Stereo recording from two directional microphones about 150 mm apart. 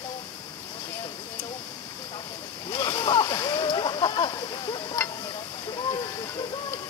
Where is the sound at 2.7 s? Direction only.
30° left (ahead or behind).